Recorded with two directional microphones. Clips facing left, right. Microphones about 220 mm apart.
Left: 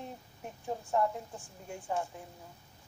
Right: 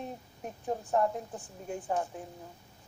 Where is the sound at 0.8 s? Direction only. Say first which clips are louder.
Right 1 dB; 20° right (ahead or behind).